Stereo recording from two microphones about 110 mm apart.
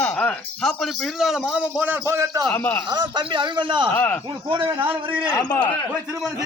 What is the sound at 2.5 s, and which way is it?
Speech, 15° left (ahead or behind).